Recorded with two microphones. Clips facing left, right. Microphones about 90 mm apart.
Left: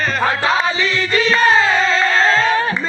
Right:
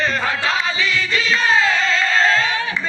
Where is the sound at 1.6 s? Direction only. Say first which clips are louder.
Left 3 dB; 30° left (ahead or behind).